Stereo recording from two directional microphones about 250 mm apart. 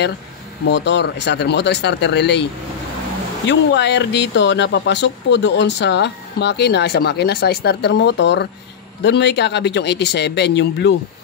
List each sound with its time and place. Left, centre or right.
0.7 s speech: left
3.4 s speech: left